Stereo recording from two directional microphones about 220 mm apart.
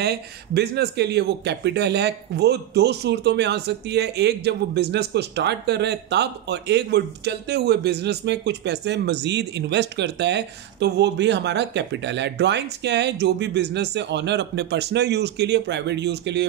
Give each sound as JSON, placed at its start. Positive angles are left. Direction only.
{"t": 0.0, "sound": "speech", "side_deg": -45}